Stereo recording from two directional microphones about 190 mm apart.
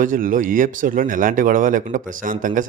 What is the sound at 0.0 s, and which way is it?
Speech, 45° right (ahead or behind).